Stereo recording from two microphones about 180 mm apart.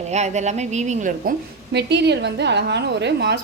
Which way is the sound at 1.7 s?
70° right (ahead or behind).